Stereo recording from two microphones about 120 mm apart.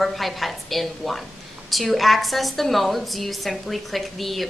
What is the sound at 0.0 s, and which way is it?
A woman's voice, centre (ahead or behind).